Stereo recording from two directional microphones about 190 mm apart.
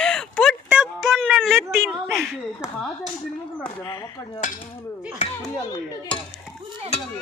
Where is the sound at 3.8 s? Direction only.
20° left (ahead or behind).